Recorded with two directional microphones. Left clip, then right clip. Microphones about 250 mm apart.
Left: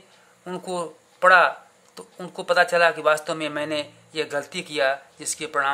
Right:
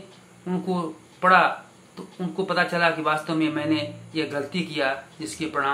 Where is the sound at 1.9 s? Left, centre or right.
Left.